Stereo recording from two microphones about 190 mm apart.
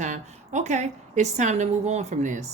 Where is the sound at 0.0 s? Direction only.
40° right (ahead or behind).